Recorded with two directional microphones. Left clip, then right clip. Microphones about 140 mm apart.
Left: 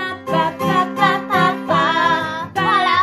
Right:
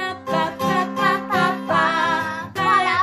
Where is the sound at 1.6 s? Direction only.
25° right (ahead or behind).